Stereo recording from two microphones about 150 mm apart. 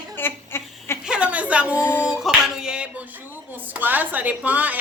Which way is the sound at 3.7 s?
10° right (ahead or behind).